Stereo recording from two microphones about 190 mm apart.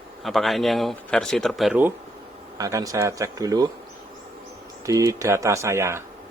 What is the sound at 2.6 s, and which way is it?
Speech, 20° right (ahead or behind).